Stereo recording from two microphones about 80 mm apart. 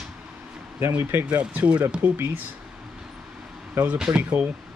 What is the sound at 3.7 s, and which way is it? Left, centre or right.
Speech, right.